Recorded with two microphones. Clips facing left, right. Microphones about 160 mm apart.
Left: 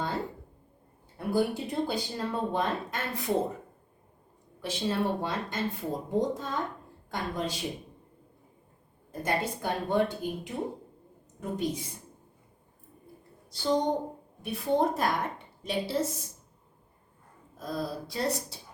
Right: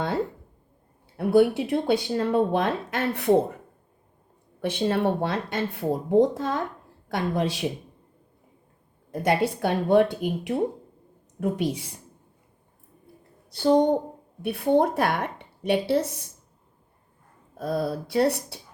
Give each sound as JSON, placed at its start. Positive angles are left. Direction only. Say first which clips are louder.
{"t": 1.1, "sound": "speech", "louder": "right 9 dB", "side_deg": -70}
{"t": 4.6, "sound": "speech", "louder": "right 6 dB", "side_deg": -60}
{"t": 9.2, "sound": "speech", "louder": "right 7 dB", "side_deg": -75}
{"t": 13.5, "sound": "a woman's voice", "louder": "right 8 dB", "side_deg": -55}
{"t": 17.6, "sound": "speech", "louder": "right 7 dB", "side_deg": -65}